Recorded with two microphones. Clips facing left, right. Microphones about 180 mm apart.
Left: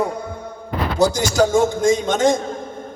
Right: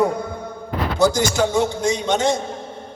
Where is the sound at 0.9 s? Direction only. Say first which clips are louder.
Left 1 dB; 40° left (ahead or behind).